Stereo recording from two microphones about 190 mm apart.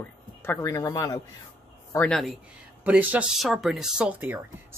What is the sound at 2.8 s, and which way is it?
Speech, 10° right (ahead or behind).